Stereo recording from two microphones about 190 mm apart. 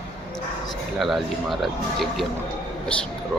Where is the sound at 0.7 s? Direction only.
Centre (ahead or behind).